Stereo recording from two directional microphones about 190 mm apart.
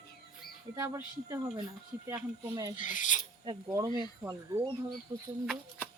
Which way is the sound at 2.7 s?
40° left (ahead or behind).